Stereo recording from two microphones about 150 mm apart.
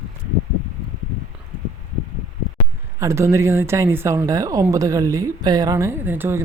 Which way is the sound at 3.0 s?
20° right (ahead or behind).